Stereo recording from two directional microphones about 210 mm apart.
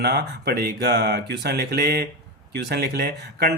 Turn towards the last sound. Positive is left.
turn(degrees=-50)  # may be behind; listen again after turning